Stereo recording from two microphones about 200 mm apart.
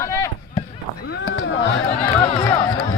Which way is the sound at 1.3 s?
65° left (ahead or behind).